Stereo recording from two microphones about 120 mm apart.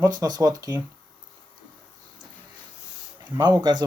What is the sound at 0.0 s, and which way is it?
Speech, 35° right (ahead or behind).